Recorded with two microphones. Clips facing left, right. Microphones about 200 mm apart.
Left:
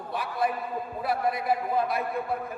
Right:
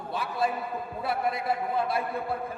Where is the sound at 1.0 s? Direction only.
25° right (ahead or behind).